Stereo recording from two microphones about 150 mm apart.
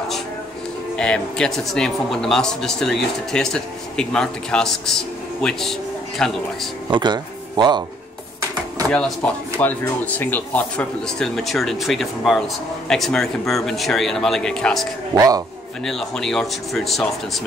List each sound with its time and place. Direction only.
0.9 s a man's voice: 5° left (ahead or behind)
6.9 s speech: 30° right (ahead or behind)
8.9 s a man's voice: 10° left (ahead or behind)
15.1 s a man's voice: 25° right (ahead or behind)
15.8 s a man's voice: 5° left (ahead or behind)